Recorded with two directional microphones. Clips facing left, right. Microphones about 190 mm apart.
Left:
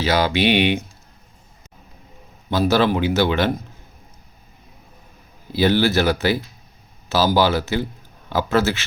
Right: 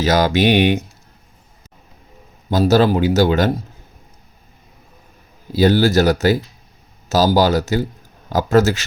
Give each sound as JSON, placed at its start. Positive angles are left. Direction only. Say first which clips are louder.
{"t": 0.0, "sound": "speech", "louder": "right 3 dB", "side_deg": -45}
{"t": 2.5, "sound": "a man's voice", "louder": "right 4 dB", "side_deg": -40}
{"t": 5.5, "sound": "a man's voice", "louder": "right 3 dB", "side_deg": -40}